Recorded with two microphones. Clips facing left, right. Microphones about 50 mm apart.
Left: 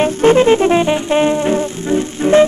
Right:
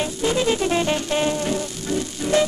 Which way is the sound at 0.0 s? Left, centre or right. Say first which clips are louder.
Left 11 dB; left.